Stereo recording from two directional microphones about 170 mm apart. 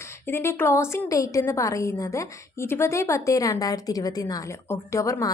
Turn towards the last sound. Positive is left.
turn(degrees=20)  # may be behind; listen again after turning